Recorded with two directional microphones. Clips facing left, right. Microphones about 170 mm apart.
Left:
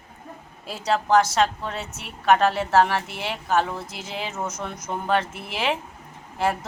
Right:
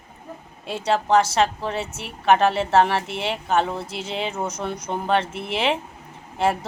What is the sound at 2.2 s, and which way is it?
Speech, centre (ahead or behind).